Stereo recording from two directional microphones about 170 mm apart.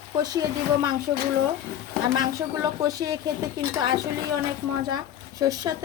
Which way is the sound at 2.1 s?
25° right (ahead or behind).